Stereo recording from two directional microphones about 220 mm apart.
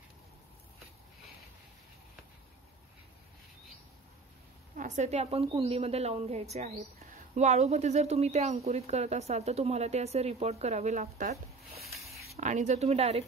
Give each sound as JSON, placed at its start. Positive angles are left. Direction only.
{"t": 4.7, "sound": "speech", "side_deg": -35}